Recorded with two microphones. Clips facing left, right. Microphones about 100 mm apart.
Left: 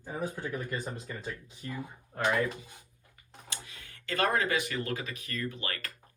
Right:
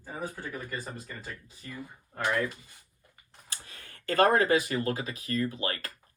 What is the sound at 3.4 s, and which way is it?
Speech, 45° right (ahead or behind).